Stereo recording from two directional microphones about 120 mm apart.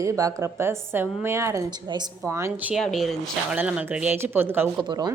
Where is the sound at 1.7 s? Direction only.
35° right (ahead or behind).